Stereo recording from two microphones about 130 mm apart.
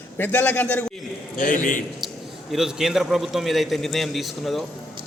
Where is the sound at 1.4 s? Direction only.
90° left.